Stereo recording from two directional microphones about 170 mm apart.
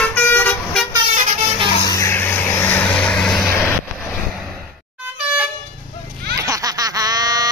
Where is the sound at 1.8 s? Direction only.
20° left (ahead or behind).